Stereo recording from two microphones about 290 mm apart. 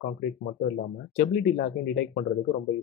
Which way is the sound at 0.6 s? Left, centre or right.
Left.